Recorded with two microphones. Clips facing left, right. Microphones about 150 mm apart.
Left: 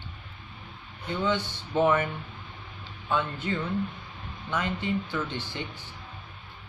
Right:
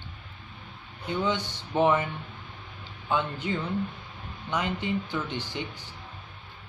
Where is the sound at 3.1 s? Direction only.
15° right (ahead or behind).